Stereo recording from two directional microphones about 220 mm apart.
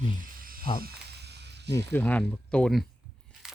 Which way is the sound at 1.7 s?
10° left (ahead or behind).